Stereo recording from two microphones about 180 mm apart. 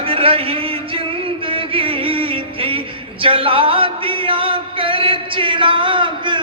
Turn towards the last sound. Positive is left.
turn(degrees=-25)  # may be behind; listen again after turning